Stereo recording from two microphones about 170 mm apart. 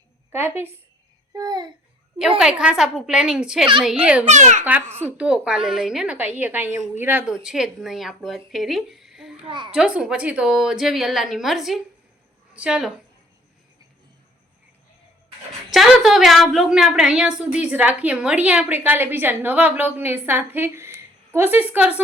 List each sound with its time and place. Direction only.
0.3 s a woman's voice: 15° right (ahead or behind)
1.3 s a child's voice: 25° right (ahead or behind)
2.4 s a woman's voice: 5° right (ahead or behind)
4.3 s a child's voice: 45° right (ahead or behind)
4.9 s a woman's voice: 10° right (ahead or behind)
9.4 s a child's voice: 30° right (ahead or behind)
9.7 s a woman's voice: 5° right (ahead or behind)
15.7 s a woman's voice: centre (ahead or behind)